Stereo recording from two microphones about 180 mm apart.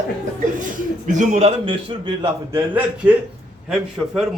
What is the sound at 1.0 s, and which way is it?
A man's voice, 45° right (ahead or behind).